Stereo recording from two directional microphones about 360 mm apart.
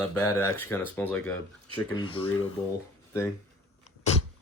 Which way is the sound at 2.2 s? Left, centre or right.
Left.